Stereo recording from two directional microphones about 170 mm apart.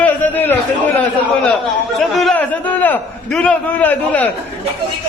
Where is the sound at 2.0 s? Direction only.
Centre (ahead or behind).